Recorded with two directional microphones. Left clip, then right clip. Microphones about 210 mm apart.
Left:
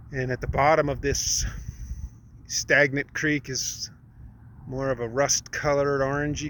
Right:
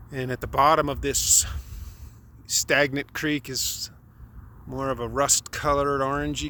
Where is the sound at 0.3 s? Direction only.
20° right (ahead or behind).